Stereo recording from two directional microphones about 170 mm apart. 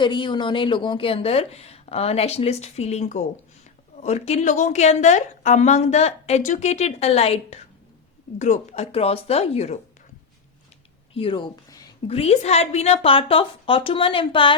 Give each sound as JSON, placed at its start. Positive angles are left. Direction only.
{"t": 0.0, "sound": "a woman's voice", "side_deg": 30}
{"t": 11.1, "sound": "a sound", "side_deg": 30}
{"t": 12.0, "sound": "a woman's voice", "side_deg": 35}